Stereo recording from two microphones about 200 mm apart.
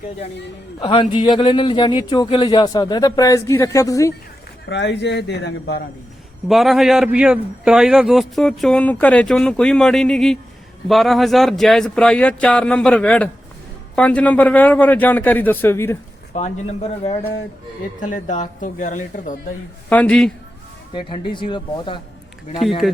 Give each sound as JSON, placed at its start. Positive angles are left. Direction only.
{"t": 0.8, "sound": "speech", "side_deg": 25}
{"t": 4.7, "sound": "speech", "side_deg": 60}
{"t": 6.5, "sound": "a man's voice", "side_deg": 0}
{"t": 16.3, "sound": "speech", "side_deg": 35}
{"t": 19.9, "sound": "a man's voice", "side_deg": 5}
{"t": 20.9, "sound": "speech", "side_deg": 25}
{"t": 22.8, "sound": "a man's voice", "side_deg": 0}